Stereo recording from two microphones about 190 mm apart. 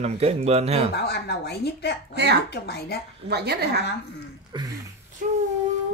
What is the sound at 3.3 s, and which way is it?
Speech, 60° right (ahead or behind).